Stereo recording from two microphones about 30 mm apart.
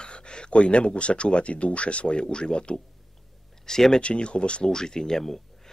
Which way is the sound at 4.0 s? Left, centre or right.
Left.